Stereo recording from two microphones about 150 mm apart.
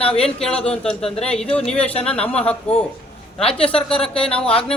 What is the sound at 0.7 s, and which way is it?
A man's voice, 5° left (ahead or behind).